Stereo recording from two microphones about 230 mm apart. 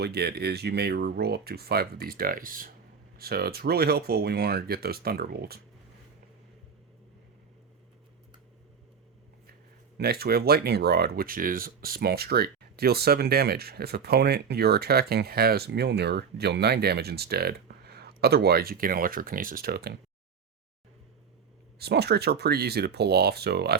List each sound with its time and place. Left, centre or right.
0.0 s speech: right
10.0 s speech: right
21.8 s speech: right